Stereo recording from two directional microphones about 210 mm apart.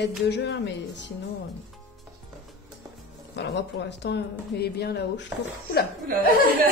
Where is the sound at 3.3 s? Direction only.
55° left (ahead or behind).